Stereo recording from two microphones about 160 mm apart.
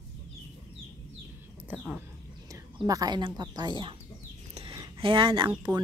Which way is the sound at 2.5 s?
20° right (ahead or behind).